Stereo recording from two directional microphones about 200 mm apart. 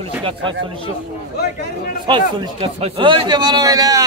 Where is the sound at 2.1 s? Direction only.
25° right (ahead or behind).